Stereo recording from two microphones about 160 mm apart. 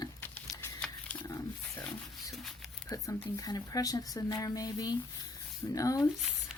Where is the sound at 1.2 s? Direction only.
20° left (ahead or behind).